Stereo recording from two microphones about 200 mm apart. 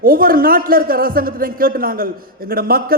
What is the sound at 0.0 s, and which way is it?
Speech, 45° right (ahead or behind).